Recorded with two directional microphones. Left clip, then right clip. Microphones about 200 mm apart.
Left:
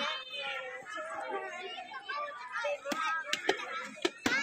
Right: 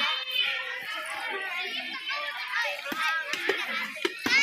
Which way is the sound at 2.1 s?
50° left (ahead or behind).